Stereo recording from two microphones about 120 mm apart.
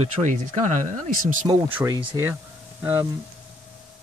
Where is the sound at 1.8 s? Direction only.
15° right (ahead or behind).